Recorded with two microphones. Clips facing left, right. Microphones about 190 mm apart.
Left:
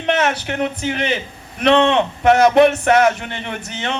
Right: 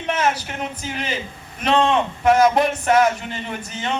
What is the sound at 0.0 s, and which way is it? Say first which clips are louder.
A man's voice: left 3 dB; 70° left (ahead or behind).